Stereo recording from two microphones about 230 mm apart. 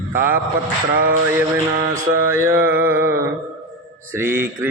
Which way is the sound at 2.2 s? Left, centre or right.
Centre.